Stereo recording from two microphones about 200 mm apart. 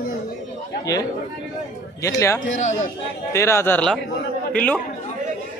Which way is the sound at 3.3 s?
15° left (ahead or behind).